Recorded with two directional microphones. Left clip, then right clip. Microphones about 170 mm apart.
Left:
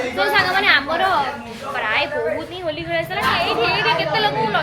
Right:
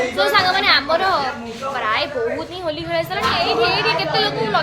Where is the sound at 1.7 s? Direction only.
20° right (ahead or behind).